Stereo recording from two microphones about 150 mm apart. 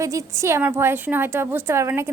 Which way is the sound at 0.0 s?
20° right (ahead or behind).